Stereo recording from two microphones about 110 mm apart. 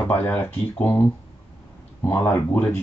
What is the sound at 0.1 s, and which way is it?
Speech, 15° left (ahead or behind).